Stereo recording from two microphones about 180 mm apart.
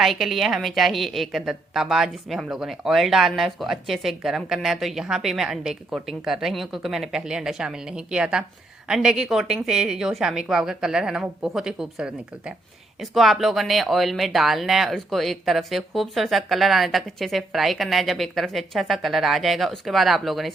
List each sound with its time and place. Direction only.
0.0 s a woman's voice: centre (ahead or behind)